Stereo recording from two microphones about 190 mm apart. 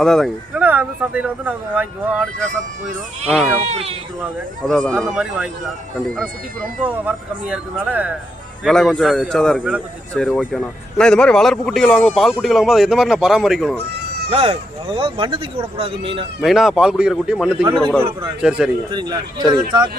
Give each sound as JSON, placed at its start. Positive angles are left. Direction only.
{"t": 0.0, "sound": "speech", "side_deg": 0}
{"t": 3.3, "sound": "a man's voice", "side_deg": 0}
{"t": 3.6, "sound": "speech", "side_deg": -35}
{"t": 4.7, "sound": "a man's voice", "side_deg": 5}
{"t": 6.8, "sound": "a man's voice", "side_deg": -10}
{"t": 14.3, "sound": "speech", "side_deg": -30}
{"t": 16.4, "sound": "a man's voice", "side_deg": 0}
{"t": 18.9, "sound": "speech", "side_deg": -25}